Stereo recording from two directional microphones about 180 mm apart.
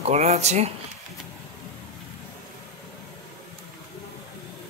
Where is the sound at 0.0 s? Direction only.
35° right (ahead or behind).